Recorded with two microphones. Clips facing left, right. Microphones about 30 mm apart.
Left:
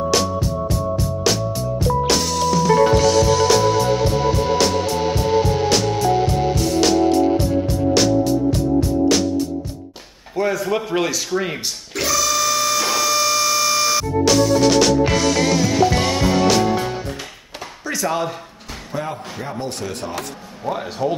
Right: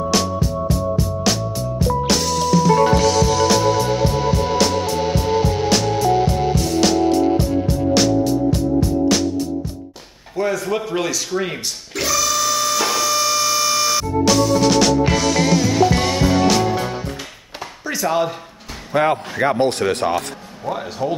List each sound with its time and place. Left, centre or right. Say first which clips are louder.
0.1 s music: even; centre
10.3 s a sound: left 1 dB; centre
18.9 s speech: right 10 dB; right
20.6 s speech: left 1 dB; centre